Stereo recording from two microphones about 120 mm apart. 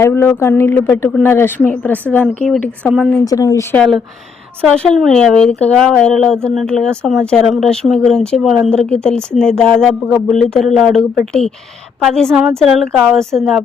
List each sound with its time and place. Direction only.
0.0 s speech: 20° left (ahead or behind); by 3.2 s centre (ahead or behind)
3.2 s speech: 25° left (ahead or behind)
3.8 s speech: centre (ahead or behind)
12.1 s speech: 5° left (ahead or behind)